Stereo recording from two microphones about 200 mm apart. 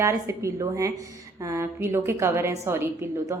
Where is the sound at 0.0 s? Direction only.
15° right (ahead or behind).